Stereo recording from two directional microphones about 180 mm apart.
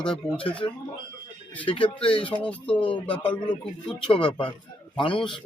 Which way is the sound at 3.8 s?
30° left (ahead or behind).